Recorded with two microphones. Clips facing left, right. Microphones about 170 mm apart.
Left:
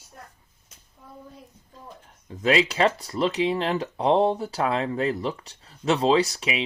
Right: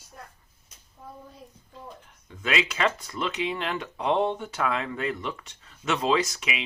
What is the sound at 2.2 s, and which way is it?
Speech, 35° left (ahead or behind).